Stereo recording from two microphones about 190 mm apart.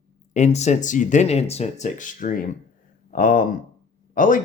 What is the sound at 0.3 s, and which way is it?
Speech, 35° left (ahead or behind).